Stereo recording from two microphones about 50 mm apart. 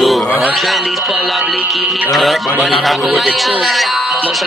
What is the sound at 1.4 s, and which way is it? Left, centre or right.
Music, right.